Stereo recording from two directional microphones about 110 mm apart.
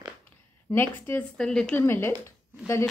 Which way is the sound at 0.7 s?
20° left (ahead or behind).